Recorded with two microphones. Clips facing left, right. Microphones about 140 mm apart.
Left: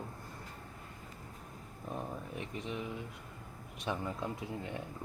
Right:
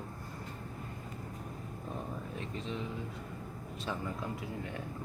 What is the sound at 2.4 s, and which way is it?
Speech, 15° left (ahead or behind).